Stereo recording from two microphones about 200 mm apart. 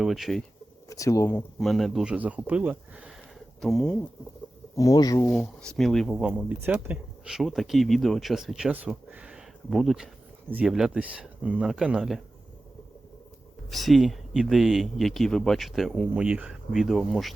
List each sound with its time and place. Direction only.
0.0 s speech: centre (ahead or behind)
0.9 s speech: 15° left (ahead or behind)
1.5 s speech: centre (ahead or behind)
4.8 s speech: 15° left (ahead or behind)
5.3 s speech: centre (ahead or behind)
13.7 s speech: centre (ahead or behind)